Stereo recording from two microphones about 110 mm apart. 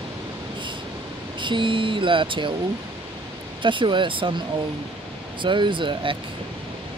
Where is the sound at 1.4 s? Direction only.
45° right (ahead or behind).